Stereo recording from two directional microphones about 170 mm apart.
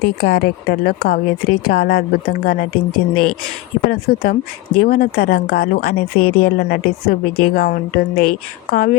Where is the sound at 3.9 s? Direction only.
65° left (ahead or behind).